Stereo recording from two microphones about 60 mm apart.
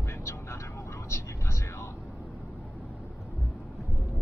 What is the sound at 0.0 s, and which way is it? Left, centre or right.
Vehicle, left.